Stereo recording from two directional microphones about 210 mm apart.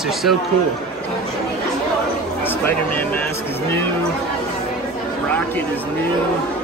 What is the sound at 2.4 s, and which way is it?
Speech, 10° left (ahead or behind).